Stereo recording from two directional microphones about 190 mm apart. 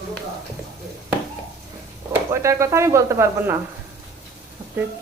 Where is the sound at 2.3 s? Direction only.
15° right (ahead or behind).